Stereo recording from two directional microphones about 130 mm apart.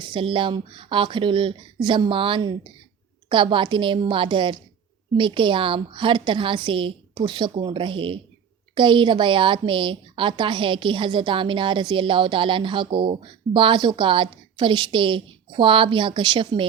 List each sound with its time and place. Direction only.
0.0 s a woman's voice: 40° right (ahead or behind)